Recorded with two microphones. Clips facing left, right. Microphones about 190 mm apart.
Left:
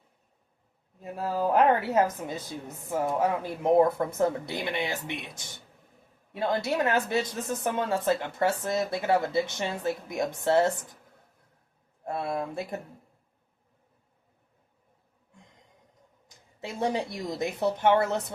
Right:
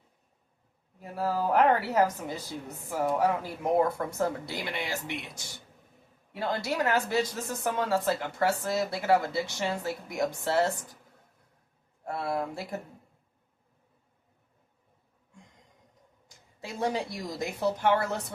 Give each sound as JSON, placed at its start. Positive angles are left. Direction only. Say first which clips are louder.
{"t": 1.1, "sound": "speech", "louder": "left 1 dB", "side_deg": 20}
{"t": 6.3, "sound": "speech", "louder": "left 3 dB", "side_deg": 25}
{"t": 12.0, "sound": "speech", "louder": "left 1 dB", "side_deg": 25}
{"t": 16.6, "sound": "speech", "louder": "left 2 dB", "side_deg": 25}